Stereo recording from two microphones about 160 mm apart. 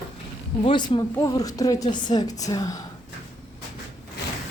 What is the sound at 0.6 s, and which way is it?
A woman's voice, 30° left (ahead or behind).